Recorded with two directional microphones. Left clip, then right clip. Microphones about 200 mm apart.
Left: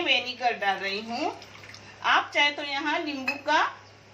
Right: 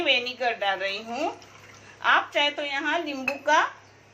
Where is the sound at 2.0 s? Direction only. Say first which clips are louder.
Right 1 dB; 40° right (ahead or behind).